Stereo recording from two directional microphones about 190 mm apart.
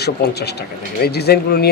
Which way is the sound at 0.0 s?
60° left (ahead or behind).